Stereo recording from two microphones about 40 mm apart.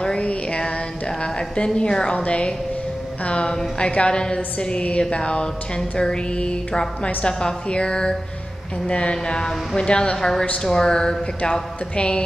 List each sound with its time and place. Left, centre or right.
0.2 s music: left
1.2 s a woman's voice: left